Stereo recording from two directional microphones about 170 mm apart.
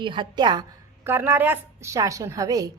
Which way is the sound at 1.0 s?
15° right (ahead or behind).